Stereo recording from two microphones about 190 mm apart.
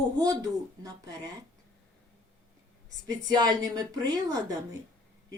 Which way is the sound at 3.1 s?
20° right (ahead or behind).